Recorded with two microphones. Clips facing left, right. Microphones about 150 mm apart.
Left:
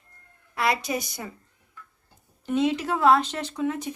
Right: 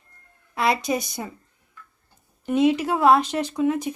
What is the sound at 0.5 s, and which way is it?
Speech, 25° right (ahead or behind).